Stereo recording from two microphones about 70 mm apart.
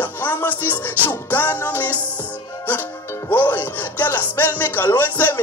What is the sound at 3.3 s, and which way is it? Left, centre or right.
Speech, left.